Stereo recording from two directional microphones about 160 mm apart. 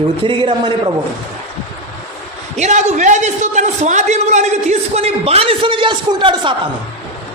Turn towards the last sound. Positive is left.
turn(degrees=-30)  # may be behind; listen again after turning